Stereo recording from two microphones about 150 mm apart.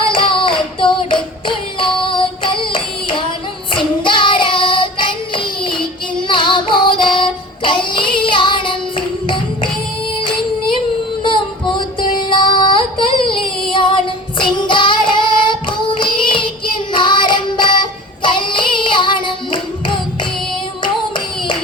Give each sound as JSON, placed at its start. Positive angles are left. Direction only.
{"t": 0.1, "sound": "singing", "side_deg": 35}
{"t": 4.0, "sound": "child singing", "side_deg": 35}
{"t": 11.3, "sound": "music", "side_deg": 35}
{"t": 14.3, "sound": "child singing", "side_deg": 35}
{"t": 16.9, "sound": "music", "side_deg": 30}
{"t": 18.2, "sound": "child singing", "side_deg": 35}